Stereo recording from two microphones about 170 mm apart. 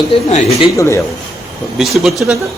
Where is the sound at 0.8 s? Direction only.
15° left (ahead or behind).